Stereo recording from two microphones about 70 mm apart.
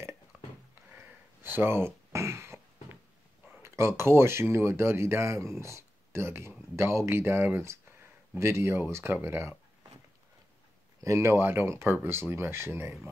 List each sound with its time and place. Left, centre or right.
0.3 s a sound: right
1.4 s speech: right
3.6 s speech: right
11.0 s speech: right